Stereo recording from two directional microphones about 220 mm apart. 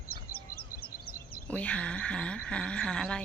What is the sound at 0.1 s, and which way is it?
Bird, 45° left (ahead or behind).